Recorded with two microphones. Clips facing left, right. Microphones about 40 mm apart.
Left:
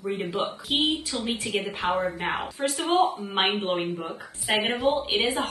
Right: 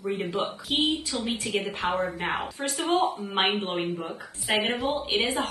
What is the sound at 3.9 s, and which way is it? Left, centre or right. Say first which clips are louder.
Speech: even; left.